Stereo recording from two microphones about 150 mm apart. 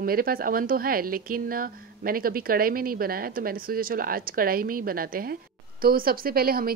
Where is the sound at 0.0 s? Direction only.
80° right.